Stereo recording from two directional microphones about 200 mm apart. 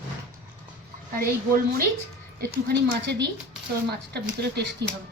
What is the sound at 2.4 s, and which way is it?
A woman's voice, 55° right (ahead or behind).